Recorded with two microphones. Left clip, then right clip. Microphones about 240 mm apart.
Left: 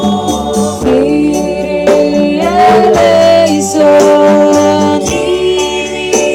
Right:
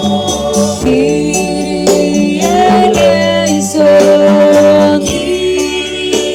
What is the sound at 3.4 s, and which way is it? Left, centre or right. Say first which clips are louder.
Music: left 3 dB; right.